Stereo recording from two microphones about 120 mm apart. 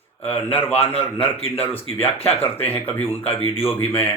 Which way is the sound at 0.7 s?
55° left (ahead or behind).